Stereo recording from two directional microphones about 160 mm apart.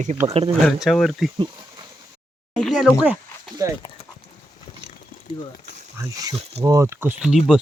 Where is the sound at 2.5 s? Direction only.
Centre (ahead or behind).